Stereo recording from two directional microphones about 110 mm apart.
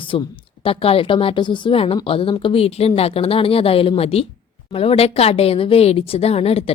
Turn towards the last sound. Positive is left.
turn(degrees=65)  # may be behind; listen again after turning